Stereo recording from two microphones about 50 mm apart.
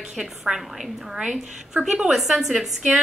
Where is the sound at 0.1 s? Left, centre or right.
Centre.